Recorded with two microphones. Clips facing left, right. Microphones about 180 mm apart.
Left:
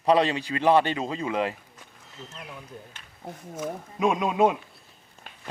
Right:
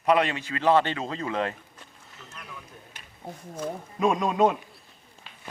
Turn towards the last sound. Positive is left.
turn(degrees=50)  # may be behind; listen again after turning